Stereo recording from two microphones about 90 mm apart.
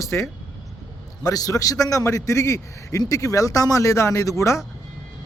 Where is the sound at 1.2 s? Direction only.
40° left (ahead or behind).